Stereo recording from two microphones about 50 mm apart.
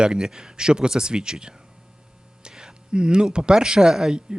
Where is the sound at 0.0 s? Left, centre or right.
Centre.